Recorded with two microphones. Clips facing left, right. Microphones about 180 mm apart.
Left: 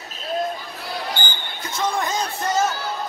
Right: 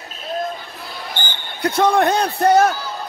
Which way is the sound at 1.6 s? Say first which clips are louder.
Right 9 dB; 60° right (ahead or behind).